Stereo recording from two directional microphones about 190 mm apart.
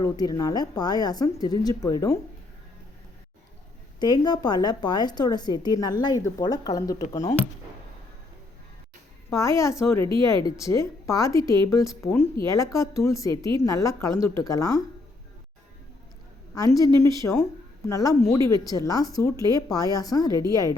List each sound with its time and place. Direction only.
0.0 s a woman's voice: 20° left (ahead or behind)
4.0 s a woman's voice: 20° left (ahead or behind)
9.3 s a woman's voice: 15° left (ahead or behind)
16.6 s a woman's voice: 20° left (ahead or behind)
20.3 s a woman's voice: 20° right (ahead or behind)